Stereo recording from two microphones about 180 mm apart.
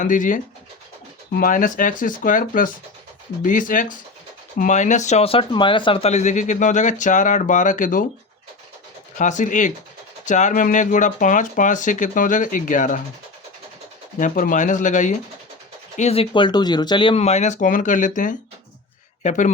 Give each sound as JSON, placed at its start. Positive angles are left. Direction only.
{"t": 0.0, "sound": "speech", "side_deg": 45}
{"t": 9.1, "sound": "speech", "side_deg": 45}
{"t": 14.2, "sound": "speech", "side_deg": 45}